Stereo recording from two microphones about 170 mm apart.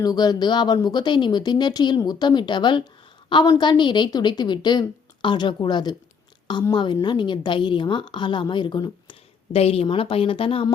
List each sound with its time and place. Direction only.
0.0 s a woman's voice: 25° left (ahead or behind)